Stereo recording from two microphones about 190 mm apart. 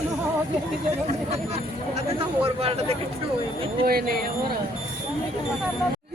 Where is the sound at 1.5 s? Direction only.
30° right (ahead or behind).